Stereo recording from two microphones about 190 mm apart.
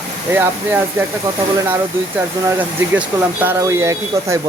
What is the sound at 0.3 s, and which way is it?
Speech, 10° right (ahead or behind).